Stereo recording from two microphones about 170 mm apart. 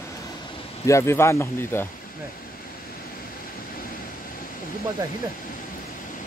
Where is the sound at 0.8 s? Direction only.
15° left (ahead or behind).